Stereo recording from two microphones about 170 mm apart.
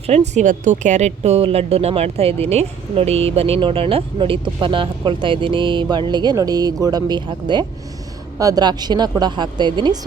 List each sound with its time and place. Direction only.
0.1 s speech: 40° right (ahead or behind); by 10.1 s 25° right (ahead or behind)